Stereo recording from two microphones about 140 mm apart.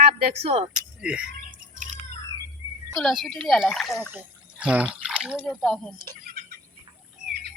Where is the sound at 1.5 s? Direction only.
70° right (ahead or behind).